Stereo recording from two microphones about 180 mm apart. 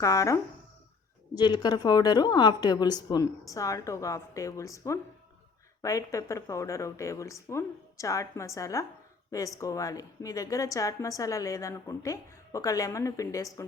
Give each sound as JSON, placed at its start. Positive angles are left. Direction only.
{"t": 0.0, "sound": "a woman's voice", "side_deg": 20}
{"t": 1.4, "sound": "a woman's voice", "side_deg": 25}